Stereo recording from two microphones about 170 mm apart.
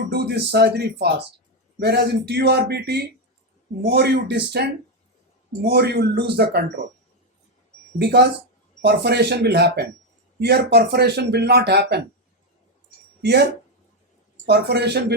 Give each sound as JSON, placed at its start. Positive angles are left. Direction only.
{"t": 0.1, "sound": "speech", "side_deg": -75}
{"t": 7.9, "sound": "speech", "side_deg": -75}
{"t": 13.2, "sound": "speech", "side_deg": -80}